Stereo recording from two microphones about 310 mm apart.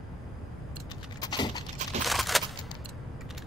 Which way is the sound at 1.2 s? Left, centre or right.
Centre.